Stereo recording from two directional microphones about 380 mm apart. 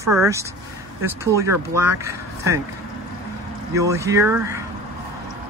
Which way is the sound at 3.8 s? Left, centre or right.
Centre.